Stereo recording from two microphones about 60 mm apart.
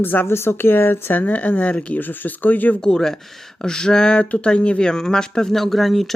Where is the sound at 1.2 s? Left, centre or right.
Left.